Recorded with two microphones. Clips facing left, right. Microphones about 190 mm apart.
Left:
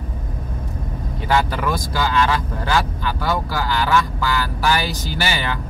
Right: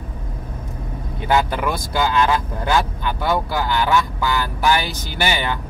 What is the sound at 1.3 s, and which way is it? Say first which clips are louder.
Speech: right 1 dB; 20° right (ahead or behind).